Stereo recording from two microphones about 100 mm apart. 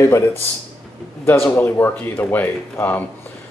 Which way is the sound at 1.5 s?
25° left (ahead or behind).